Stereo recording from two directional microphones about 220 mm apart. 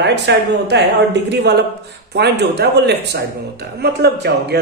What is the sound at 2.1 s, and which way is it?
Speech, 50° right (ahead or behind).